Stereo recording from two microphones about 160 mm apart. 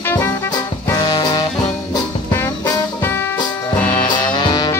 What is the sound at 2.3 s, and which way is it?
Music, 15° left (ahead or behind).